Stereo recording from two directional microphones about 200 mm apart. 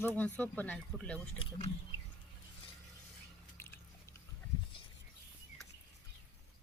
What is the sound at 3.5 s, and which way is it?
Biting, 15° left (ahead or behind).